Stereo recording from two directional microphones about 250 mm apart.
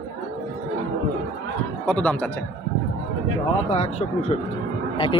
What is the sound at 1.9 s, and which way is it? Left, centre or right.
Speech, centre.